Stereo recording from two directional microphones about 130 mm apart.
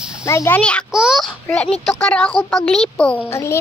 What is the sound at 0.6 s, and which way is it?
Speech, 10° left (ahead or behind).